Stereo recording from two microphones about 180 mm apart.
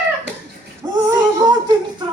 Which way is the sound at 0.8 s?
25° right (ahead or behind).